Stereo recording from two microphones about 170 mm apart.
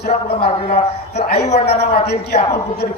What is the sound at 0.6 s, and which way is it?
A man's voice, 40° left (ahead or behind).